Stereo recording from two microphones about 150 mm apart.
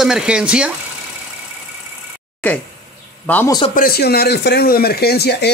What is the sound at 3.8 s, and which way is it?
Speech, 90° left.